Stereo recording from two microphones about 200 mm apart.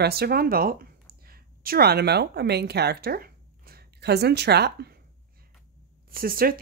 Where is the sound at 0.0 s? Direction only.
50° right (ahead or behind).